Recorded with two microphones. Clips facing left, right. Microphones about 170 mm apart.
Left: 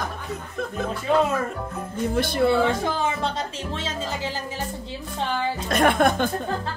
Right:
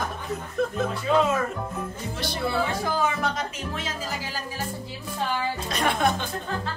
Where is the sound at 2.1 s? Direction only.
55° left (ahead or behind).